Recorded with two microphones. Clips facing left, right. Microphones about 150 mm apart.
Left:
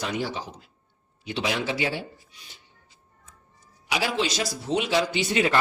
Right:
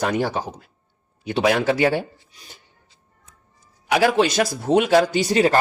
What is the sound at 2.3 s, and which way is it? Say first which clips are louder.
Speech: right 5 dB; 40° right (ahead or behind).